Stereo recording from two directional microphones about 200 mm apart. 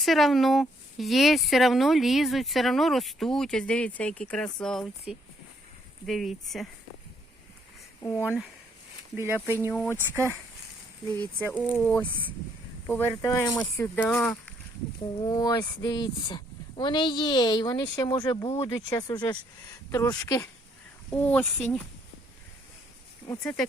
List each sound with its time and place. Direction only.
0.0 s speech: centre (ahead or behind)
9.1 s speech: 10° right (ahead or behind)
9.6 s speech: 10° left (ahead or behind)
11.3 s speech: 5° left (ahead or behind)
15.2 s speech: 20° left (ahead or behind)
21.1 s speech: 5° left (ahead or behind)
23.4 s speech: 5° left (ahead or behind)